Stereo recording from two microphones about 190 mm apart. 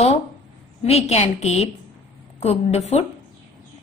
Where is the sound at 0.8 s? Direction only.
35° left (ahead or behind).